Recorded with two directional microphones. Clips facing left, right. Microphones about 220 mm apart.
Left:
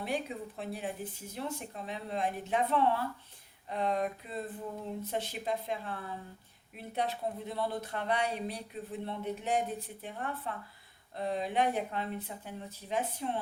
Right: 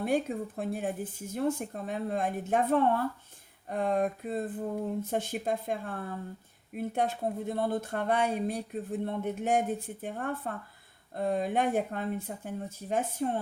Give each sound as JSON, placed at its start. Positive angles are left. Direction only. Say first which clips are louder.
{"t": 0.0, "sound": "speech", "louder": "right 7 dB", "side_deg": -50}